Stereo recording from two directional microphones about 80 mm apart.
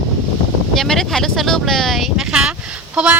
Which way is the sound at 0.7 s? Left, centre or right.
Centre.